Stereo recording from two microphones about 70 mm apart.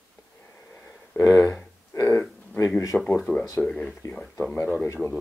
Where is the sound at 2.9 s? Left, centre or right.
Centre.